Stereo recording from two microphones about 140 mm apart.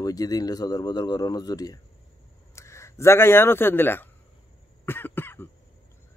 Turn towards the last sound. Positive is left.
turn(degrees=15)  # may be behind; listen again after turning